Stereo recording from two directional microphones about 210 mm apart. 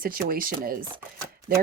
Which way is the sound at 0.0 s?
45° right (ahead or behind).